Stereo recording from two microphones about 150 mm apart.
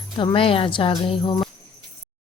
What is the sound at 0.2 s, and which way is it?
Speech, 35° left (ahead or behind).